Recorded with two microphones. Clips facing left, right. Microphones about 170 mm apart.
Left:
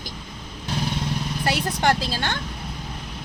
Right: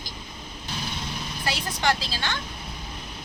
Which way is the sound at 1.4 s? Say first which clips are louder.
Left 4 dB; 55° left (ahead or behind).